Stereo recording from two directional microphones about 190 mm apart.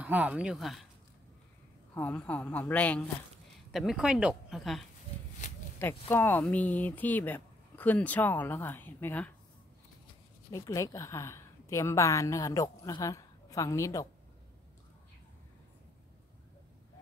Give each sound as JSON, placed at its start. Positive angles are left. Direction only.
{"t": 0.0, "sound": "speech", "side_deg": -5}
{"t": 2.0, "sound": "speech", "side_deg": 10}
{"t": 5.4, "sound": "a sound", "side_deg": 40}
{"t": 5.8, "sound": "speech", "side_deg": 10}
{"t": 10.5, "sound": "a woman's voice", "side_deg": 15}